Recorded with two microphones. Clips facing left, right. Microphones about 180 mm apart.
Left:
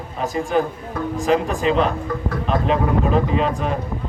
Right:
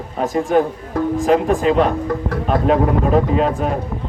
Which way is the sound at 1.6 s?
40° right (ahead or behind).